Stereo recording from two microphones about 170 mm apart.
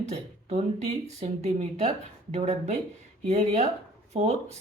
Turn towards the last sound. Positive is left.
turn(degrees=-40)  # may be behind; listen again after turning